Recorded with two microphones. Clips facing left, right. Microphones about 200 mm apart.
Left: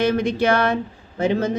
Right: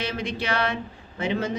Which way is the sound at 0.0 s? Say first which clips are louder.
Left 10 dB; 50° left (ahead or behind).